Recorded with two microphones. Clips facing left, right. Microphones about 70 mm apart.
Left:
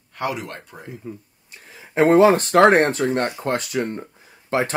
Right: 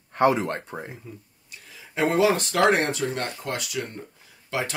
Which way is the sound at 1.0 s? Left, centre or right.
Left.